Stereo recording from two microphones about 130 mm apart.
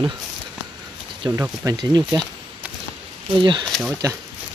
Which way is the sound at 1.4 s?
20° right (ahead or behind).